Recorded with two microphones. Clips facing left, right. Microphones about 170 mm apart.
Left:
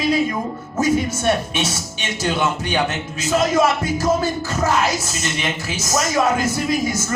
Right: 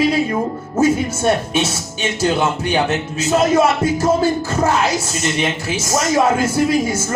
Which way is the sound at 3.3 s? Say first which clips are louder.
Right 3 dB; 30° right (ahead or behind).